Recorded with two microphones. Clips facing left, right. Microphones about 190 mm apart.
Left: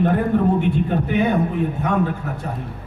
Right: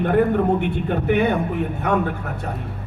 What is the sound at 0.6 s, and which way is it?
Speech, 60° right (ahead or behind).